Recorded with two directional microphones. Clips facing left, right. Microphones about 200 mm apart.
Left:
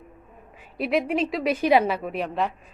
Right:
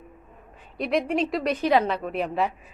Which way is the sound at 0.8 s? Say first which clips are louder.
Left 1 dB; centre (ahead or behind).